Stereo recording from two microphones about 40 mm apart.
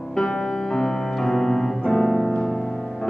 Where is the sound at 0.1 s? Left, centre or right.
Centre.